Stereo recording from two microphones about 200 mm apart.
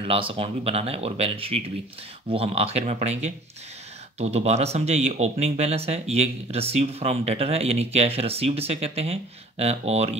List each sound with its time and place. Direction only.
0.0 s speech: 30° right (ahead or behind)